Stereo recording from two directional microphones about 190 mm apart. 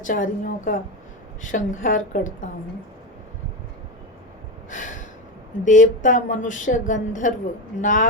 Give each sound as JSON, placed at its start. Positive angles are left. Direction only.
{"t": 0.0, "sound": "a woman's voice", "side_deg": 45}
{"t": 4.7, "sound": "gasp", "side_deg": 40}
{"t": 5.6, "sound": "a woman's voice", "side_deg": 45}